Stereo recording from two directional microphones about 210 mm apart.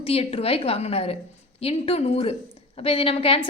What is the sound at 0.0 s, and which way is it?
A woman's voice, 25° left (ahead or behind).